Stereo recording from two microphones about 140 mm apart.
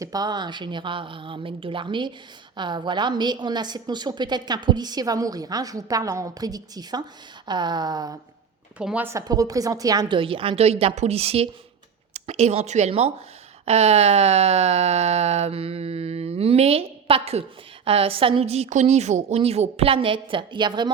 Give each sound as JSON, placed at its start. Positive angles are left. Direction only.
{"t": 0.0, "sound": "a woman's voice", "side_deg": -30}
{"t": 8.8, "sound": "a woman's voice", "side_deg": -5}
{"t": 9.0, "sound": "a woman's voice", "side_deg": -25}
{"t": 10.2, "sound": "speech", "side_deg": -40}